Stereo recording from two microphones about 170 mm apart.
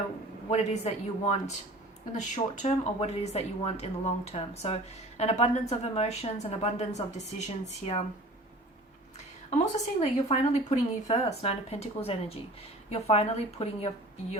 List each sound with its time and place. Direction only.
0.5 s speech: 40° left (ahead or behind)
9.5 s speech: 40° left (ahead or behind)